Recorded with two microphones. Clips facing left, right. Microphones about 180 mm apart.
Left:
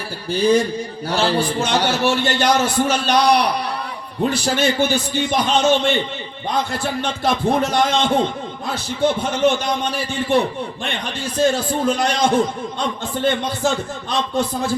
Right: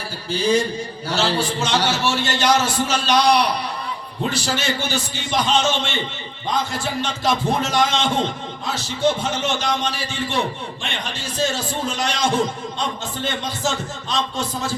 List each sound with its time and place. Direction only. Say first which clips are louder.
0.3 s a man's voice: left 3 dB; 55° left (ahead or behind)